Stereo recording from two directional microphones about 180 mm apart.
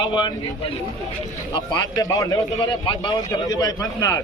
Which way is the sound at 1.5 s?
25° left (ahead or behind).